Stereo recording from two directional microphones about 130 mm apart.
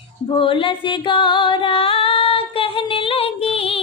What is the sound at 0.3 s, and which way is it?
Music, 40° left (ahead or behind).